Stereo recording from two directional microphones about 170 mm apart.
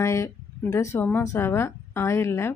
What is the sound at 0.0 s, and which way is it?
Speech, 15° left (ahead or behind).